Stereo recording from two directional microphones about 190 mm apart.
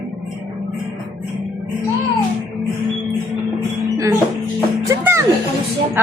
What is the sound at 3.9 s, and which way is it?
Music, 15° right (ahead or behind).